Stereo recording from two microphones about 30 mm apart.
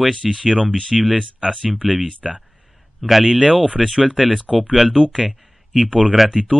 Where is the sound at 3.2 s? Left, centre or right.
Right.